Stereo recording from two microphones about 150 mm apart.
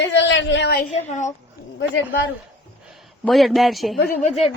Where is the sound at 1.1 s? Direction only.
50° left (ahead or behind).